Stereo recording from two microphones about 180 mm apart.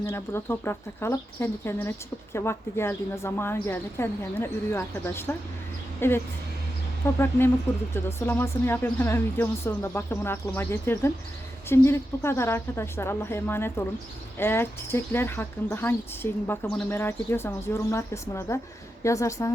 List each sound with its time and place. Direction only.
0.0 s speech: 15° left (ahead or behind)